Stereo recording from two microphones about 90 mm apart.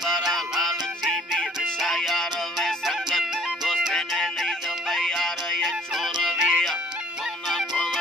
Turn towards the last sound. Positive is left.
turn(degrees=0)  # may be behind; listen again after turning